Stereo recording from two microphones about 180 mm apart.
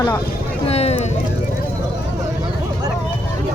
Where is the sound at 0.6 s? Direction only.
35° left (ahead or behind).